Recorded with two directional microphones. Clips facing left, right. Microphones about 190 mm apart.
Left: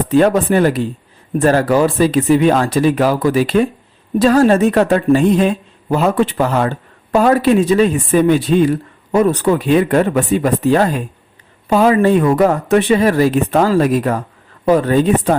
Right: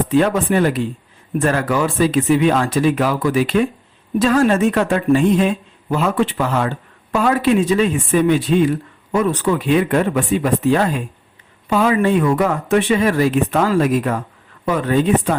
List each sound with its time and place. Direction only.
0.1 s a woman's voice: 40° left (ahead or behind)